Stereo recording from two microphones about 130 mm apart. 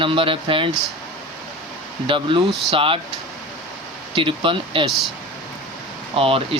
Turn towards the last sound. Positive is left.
turn(degrees=-45)  # may be behind; listen again after turning